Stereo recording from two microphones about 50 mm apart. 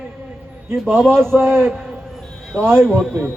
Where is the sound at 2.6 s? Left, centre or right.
Right.